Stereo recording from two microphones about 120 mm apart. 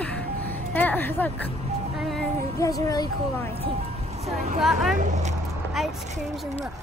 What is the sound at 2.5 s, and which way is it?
A woman's voice, 30° left (ahead or behind).